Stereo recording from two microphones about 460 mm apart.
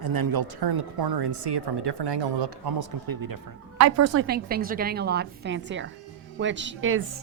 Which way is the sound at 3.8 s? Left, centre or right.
Right.